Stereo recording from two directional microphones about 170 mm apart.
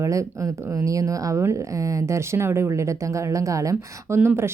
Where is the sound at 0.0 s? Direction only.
20° right (ahead or behind).